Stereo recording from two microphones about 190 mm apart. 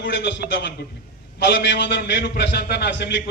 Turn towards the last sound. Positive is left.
turn(degrees=65)  # may be behind; listen again after turning